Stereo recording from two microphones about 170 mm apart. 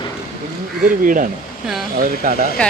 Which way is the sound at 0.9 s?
50° right (ahead or behind).